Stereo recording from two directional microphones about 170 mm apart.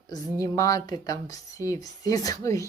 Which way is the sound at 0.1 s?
20° left (ahead or behind).